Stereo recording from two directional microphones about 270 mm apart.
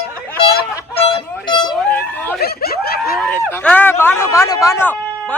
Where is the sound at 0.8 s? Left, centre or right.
Left.